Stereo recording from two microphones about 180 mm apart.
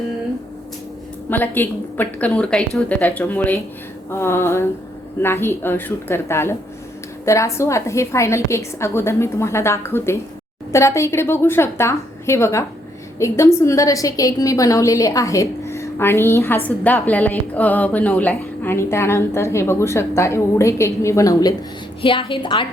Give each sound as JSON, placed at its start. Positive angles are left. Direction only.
{"t": 1.3, "sound": "a woman's voice", "side_deg": 10}
{"t": 22.0, "sound": "a woman's voice", "side_deg": 30}